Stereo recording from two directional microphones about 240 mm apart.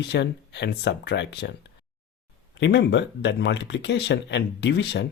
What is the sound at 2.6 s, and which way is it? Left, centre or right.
Speech, left.